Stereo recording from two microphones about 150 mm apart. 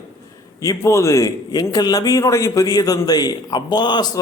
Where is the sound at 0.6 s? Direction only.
20° left (ahead or behind).